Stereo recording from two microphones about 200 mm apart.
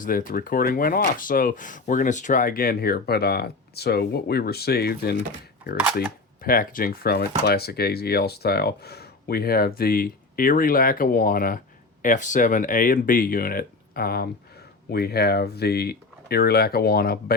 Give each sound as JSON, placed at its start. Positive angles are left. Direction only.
{"t": 0.0, "sound": "speech", "side_deg": 45}
{"t": 6.4, "sound": "speech", "side_deg": 45}